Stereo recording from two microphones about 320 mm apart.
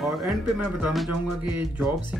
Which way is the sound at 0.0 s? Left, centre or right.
Centre.